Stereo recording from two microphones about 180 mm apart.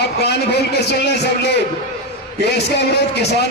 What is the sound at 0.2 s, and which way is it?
A man's voice, 65° left (ahead or behind).